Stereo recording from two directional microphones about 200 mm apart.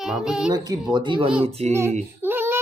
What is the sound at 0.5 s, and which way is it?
Speech, 20° right (ahead or behind).